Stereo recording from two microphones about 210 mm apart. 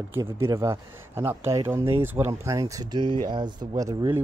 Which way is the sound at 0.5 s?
15° right (ahead or behind).